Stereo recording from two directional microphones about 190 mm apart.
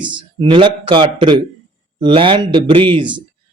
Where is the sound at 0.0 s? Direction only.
25° right (ahead or behind).